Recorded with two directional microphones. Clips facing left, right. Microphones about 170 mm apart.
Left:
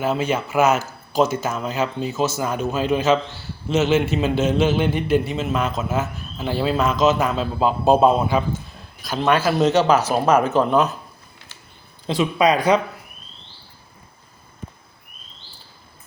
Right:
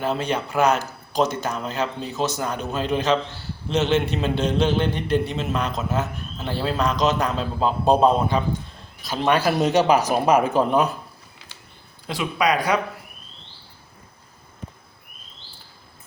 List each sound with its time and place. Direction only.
0.0 s a man's voice: 5° left (ahead or behind)
9.2 s speech: 10° right (ahead or behind)
12.0 s speech: 25° left (ahead or behind)